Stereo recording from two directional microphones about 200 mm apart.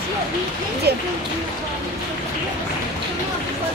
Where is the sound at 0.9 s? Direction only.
55° right (ahead or behind).